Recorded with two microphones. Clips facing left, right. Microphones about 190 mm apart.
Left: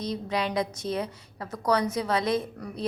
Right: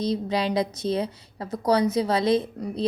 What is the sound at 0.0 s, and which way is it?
A woman's voice, 30° right (ahead or behind).